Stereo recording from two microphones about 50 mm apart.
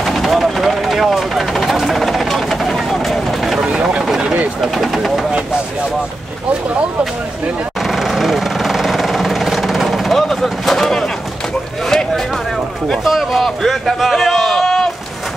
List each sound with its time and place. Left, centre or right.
0.0 s vehicle: centre
3.5 s a sound: centre
4.6 s vehicle: centre
7.8 s vehicle: centre
13.0 s a man's voice: centre